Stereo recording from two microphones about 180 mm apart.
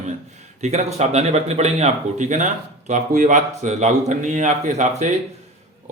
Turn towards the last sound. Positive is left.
turn(degrees=-40)  # may be behind; listen again after turning